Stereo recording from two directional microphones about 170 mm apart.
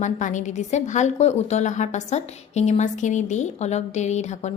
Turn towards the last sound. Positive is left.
turn(degrees=40)  # may be behind; listen again after turning